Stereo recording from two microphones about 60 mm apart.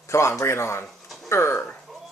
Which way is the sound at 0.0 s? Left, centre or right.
Left.